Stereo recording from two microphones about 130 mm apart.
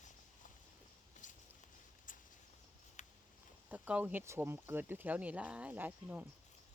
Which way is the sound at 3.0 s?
65° left (ahead or behind).